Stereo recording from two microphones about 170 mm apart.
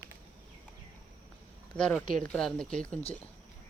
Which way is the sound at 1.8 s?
5° left (ahead or behind).